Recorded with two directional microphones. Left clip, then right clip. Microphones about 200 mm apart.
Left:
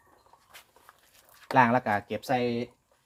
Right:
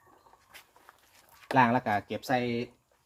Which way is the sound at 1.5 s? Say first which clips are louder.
Left 2 dB; 15° left (ahead or behind).